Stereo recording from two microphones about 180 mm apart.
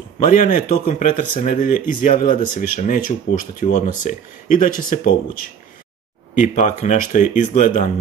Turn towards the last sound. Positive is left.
turn(degrees=45)  # may be behind; listen again after turning